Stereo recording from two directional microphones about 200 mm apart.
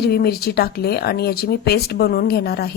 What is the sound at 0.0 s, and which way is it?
A woman's voice, 50° left (ahead or behind).